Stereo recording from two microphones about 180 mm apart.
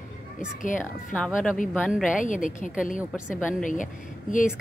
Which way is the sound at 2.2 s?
45° left (ahead or behind).